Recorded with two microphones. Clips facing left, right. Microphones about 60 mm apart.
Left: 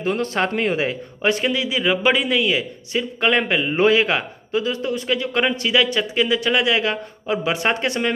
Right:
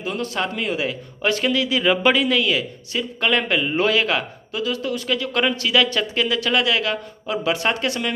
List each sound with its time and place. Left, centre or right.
0.0 s a man's voice: left